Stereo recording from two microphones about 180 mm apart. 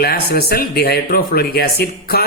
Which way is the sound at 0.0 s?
60° left (ahead or behind).